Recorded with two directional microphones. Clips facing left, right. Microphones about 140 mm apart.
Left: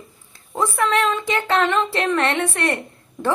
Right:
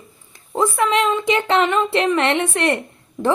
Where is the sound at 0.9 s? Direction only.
15° right (ahead or behind).